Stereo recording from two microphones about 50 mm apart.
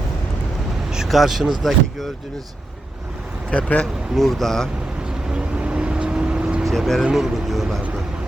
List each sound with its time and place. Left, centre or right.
1.0 s speech: centre
3.5 s speech: left
4.1 s speech: centre
5.3 s vehicle: right
6.6 s speech: centre
7.0 s speech: centre